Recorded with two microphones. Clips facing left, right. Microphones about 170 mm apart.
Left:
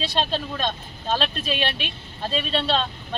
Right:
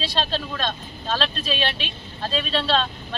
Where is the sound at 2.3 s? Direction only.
20° left (ahead or behind).